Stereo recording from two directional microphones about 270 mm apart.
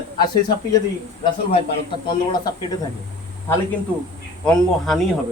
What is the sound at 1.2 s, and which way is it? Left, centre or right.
Speech, centre.